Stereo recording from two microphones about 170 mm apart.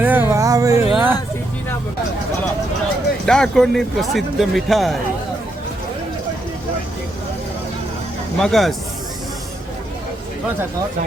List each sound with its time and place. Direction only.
0.0 s music: 10° right (ahead or behind)
0.9 s a sound: 10° right (ahead or behind)
3.2 s speech: 5° left (ahead or behind)
8.4 s speech: centre (ahead or behind)